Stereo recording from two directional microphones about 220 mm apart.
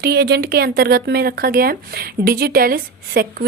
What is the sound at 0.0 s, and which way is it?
Speech, 45° right (ahead or behind).